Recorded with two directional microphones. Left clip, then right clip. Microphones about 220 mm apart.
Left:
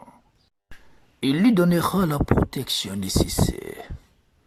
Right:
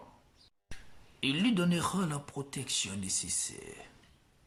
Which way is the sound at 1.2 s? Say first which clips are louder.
Left 10 dB; 35° left (ahead or behind).